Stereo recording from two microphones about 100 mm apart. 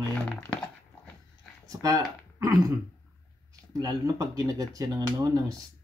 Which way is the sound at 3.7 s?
40° right (ahead or behind).